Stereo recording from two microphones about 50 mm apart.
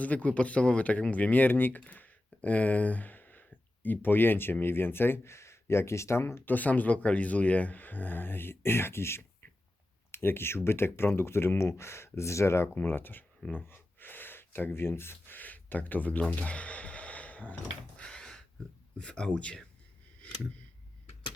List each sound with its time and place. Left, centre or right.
0.0 s speech: left
6.4 s speech: left
12.6 s speech: left
13.7 s a sound: left
15.4 s speech: left
18.0 s a sound: centre
18.9 s speech: centre